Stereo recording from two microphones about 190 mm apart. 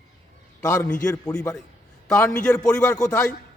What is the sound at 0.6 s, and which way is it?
A man's voice, 15° left (ahead or behind).